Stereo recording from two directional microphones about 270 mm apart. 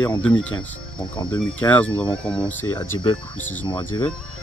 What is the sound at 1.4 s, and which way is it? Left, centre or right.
Speech, centre.